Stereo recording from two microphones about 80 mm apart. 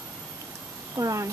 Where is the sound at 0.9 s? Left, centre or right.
Right.